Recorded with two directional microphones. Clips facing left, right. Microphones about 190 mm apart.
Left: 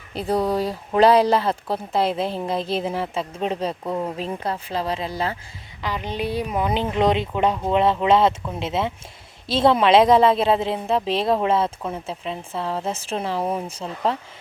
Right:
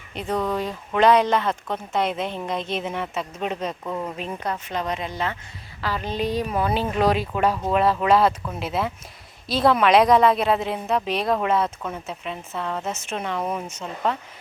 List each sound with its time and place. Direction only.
0.1 s speech: 35° left (ahead or behind)
3.8 s a woman's voice: 20° left (ahead or behind)
4.4 s speech: 30° left (ahead or behind)
5.8 s a woman's voice: 15° left (ahead or behind); by 14.2 s 30° left (ahead or behind)